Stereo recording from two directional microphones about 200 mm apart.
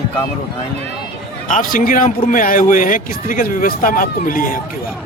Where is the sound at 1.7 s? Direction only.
40° left (ahead or behind).